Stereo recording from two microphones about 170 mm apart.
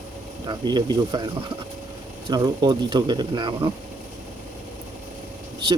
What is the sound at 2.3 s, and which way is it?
Speech, 25° right (ahead or behind).